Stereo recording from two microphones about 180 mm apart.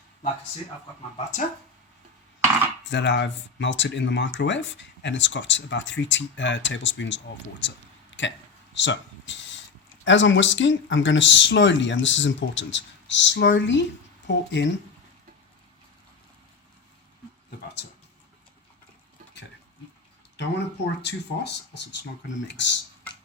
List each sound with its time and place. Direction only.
2.9 s speech: 80° left
20.3 s speech: 75° left (ahead or behind)
22.5 s speech: 85° left